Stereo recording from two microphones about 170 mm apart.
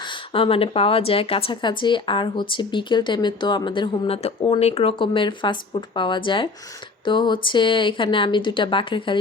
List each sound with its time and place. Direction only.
0.0 s a woman's voice: 30° left (ahead or behind)